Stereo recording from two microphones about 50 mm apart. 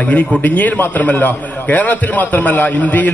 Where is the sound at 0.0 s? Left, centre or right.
Left.